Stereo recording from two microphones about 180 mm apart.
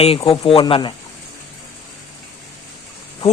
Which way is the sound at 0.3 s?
30° left (ahead or behind).